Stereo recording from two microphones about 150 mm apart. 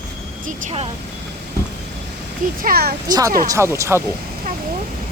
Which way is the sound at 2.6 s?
90° right.